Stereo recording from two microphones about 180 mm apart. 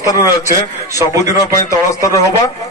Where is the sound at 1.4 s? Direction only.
15° left (ahead or behind).